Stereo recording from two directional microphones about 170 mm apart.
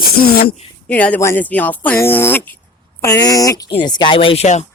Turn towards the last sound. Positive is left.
turn(degrees=40)  # may be behind; listen again after turning